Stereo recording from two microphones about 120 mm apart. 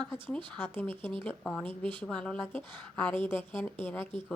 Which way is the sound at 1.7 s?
45° right (ahead or behind).